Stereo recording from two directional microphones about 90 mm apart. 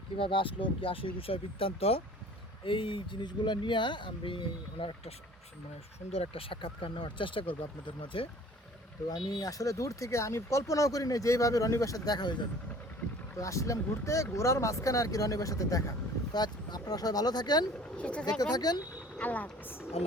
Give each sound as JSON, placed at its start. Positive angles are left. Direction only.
{"t": 0.2, "sound": "speech", "side_deg": 70}
{"t": 2.6, "sound": "speech", "side_deg": 65}
{"t": 6.3, "sound": "speech", "side_deg": 85}
{"t": 9.0, "sound": "speech", "side_deg": 45}
{"t": 13.3, "sound": "speech", "side_deg": 35}
{"t": 16.3, "sound": "speech", "side_deg": 50}
{"t": 17.7, "sound": "speech", "side_deg": 10}
{"t": 18.3, "sound": "speech", "side_deg": 50}
{"t": 19.2, "sound": "speech", "side_deg": 20}